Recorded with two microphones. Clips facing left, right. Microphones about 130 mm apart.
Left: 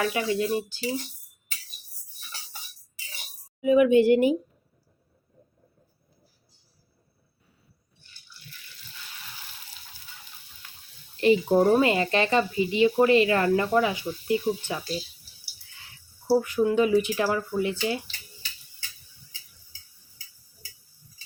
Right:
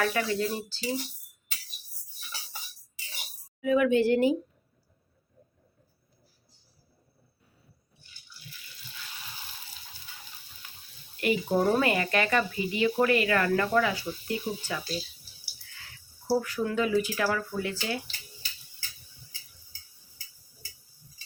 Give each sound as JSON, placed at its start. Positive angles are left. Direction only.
{"t": 0.0, "sound": "speech", "side_deg": 20}
{"t": 3.6, "sound": "speech", "side_deg": 20}
{"t": 11.2, "sound": "speech", "side_deg": 25}
{"t": 16.3, "sound": "speech", "side_deg": 20}